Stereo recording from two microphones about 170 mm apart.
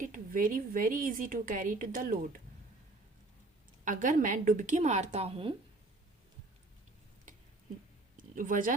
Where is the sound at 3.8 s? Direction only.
50° right (ahead or behind).